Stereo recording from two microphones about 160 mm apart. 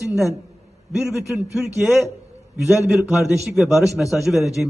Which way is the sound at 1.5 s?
5° right (ahead or behind).